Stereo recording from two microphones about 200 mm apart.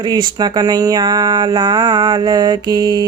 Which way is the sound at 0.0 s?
20° right (ahead or behind).